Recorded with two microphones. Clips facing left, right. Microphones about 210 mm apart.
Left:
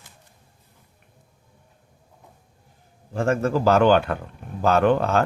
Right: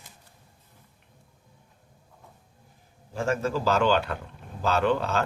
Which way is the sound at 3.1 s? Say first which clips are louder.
Left 5 dB; 55° left (ahead or behind).